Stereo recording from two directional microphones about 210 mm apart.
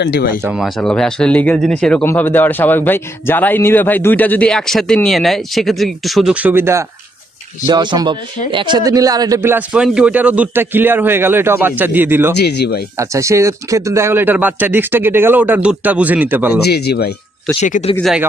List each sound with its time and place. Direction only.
0.0 s speech: 45° left (ahead or behind)
0.4 s speech: centre (ahead or behind)
12.4 s speech: 50° left (ahead or behind)
12.9 s speech: 15° right (ahead or behind)
16.6 s speech: 50° left (ahead or behind)
17.6 s speech: 35° left (ahead or behind)
17.9 s speech: centre (ahead or behind)